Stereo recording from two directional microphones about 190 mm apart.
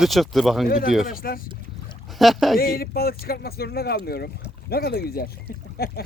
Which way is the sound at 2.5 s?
50° left (ahead or behind).